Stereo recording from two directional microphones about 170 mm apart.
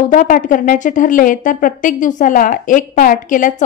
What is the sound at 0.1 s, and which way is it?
A woman's voice, 50° left (ahead or behind).